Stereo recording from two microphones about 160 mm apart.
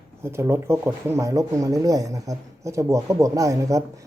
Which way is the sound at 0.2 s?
15° right (ahead or behind).